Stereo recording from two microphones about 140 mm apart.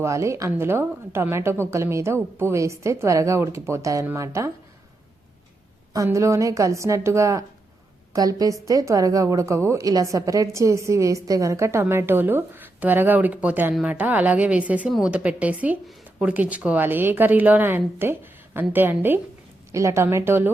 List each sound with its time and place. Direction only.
0.0 s a woman's voice: 20° right (ahead or behind)
5.9 s a woman's voice: 25° right (ahead or behind)